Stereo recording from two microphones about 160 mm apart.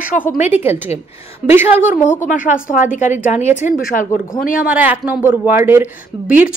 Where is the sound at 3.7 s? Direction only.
60° left (ahead or behind).